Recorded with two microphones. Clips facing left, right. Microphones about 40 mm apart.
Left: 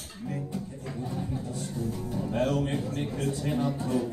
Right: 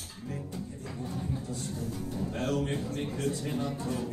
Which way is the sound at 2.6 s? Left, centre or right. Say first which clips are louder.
Left 2 dB; centre.